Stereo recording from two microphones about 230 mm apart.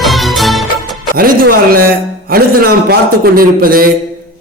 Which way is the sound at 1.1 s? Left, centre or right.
Right.